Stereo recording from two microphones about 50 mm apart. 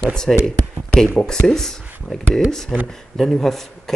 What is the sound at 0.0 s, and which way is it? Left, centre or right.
Speech, centre.